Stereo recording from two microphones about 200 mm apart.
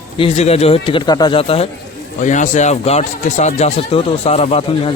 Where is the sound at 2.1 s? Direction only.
40° left (ahead or behind).